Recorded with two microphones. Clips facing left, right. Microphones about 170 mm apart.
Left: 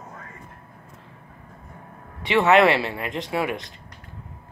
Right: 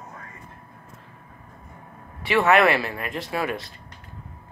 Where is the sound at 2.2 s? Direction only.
20° left (ahead or behind).